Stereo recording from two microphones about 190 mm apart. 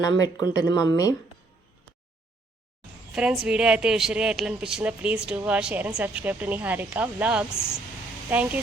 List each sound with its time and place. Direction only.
0.0 s speech: 20° left (ahead or behind)
3.1 s a woman's voice: 5° right (ahead or behind)
7.5 s speech: 15° left (ahead or behind)
8.3 s speech: 10° right (ahead or behind)